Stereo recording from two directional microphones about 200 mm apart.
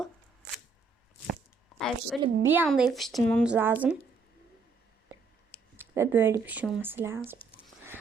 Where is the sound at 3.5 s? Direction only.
10° right (ahead or behind).